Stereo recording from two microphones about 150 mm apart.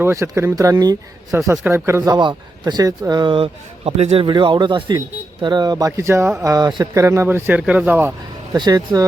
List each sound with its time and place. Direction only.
0.0 s a man's voice: 20° right (ahead or behind)
8.5 s a man's voice: 30° right (ahead or behind)